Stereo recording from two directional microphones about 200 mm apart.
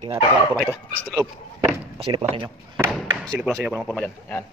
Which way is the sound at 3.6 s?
5° right (ahead or behind).